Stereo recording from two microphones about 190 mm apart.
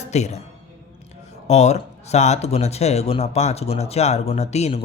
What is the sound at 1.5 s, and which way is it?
Speech, 35° left (ahead or behind).